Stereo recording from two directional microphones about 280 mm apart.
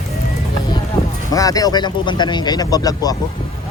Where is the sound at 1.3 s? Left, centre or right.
Centre.